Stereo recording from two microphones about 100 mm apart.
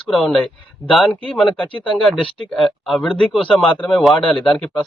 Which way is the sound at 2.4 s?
Centre (ahead or behind).